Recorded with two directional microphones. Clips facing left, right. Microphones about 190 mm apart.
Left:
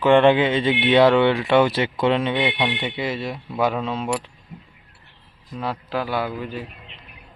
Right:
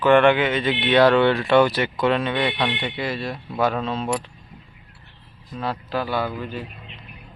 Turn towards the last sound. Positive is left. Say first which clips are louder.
# even
turn(degrees=10)  # may be behind; listen again after turning